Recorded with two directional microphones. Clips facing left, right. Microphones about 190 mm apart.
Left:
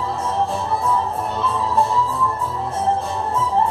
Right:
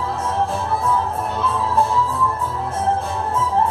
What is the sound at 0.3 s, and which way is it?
Music, centre (ahead or behind).